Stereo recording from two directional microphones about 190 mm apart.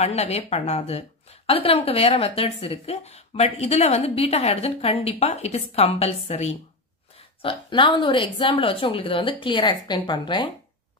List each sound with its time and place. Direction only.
0.0 s a woman's voice: 35° left (ahead or behind)